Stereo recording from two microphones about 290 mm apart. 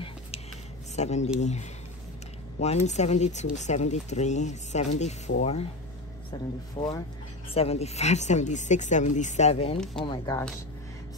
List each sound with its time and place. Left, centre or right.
0.9 s speech: left
10.0 s speech: centre